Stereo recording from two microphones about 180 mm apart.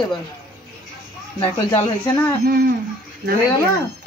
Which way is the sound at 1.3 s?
25° left (ahead or behind).